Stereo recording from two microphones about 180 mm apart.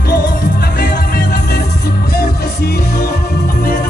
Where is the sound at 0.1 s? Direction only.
55° left (ahead or behind).